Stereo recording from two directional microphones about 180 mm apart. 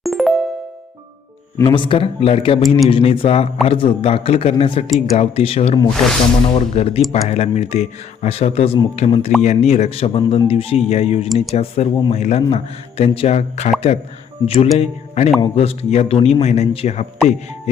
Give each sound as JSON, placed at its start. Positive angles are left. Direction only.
{"t": 0.0, "sound": "music", "side_deg": 0}
{"t": 1.5, "sound": "a man's voice", "side_deg": 25}
{"t": 5.9, "sound": "speech", "side_deg": 0}
{"t": 6.7, "sound": "a man's voice", "side_deg": 35}